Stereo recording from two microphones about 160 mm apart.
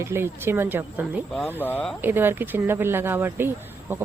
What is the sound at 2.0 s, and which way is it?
Speech, 15° right (ahead or behind).